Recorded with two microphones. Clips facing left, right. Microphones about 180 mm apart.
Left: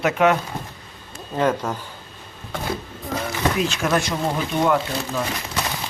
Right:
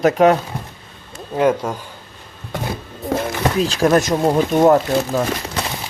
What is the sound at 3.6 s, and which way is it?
Speech, 35° right (ahead or behind).